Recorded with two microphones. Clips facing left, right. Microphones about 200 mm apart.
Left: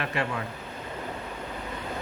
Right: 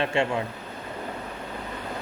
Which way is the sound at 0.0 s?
25° right (ahead or behind).